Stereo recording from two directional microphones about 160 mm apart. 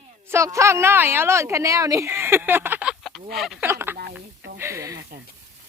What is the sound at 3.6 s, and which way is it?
Speech, 15° right (ahead or behind).